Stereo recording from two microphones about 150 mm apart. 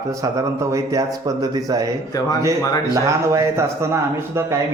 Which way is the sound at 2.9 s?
20° right (ahead or behind).